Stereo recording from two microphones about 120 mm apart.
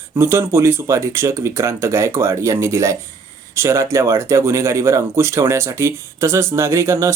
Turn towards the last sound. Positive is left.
turn(degrees=-25)  # may be behind; listen again after turning